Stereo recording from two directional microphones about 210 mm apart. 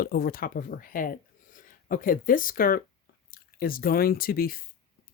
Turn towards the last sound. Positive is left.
turn(degrees=45)  # may be behind; listen again after turning